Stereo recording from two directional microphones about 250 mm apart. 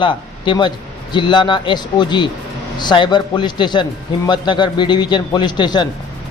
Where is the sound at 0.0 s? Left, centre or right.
Centre.